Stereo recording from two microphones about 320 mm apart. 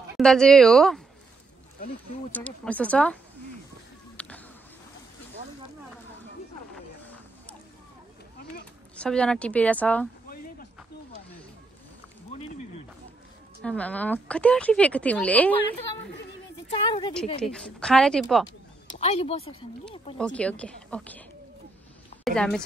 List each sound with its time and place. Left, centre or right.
0.2 s speech: centre
2.3 s speech: centre
4.2 s a sound: centre
8.9 s speech: centre
10.3 s a sound: left
13.6 s speech: centre
16.7 s a woman's voice: centre
17.4 s speech: centre
18.9 s speech: centre
20.2 s speech: centre
22.2 s a woman's voice: centre